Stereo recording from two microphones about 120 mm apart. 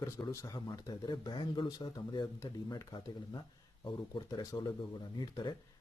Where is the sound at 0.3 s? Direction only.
30° left (ahead or behind).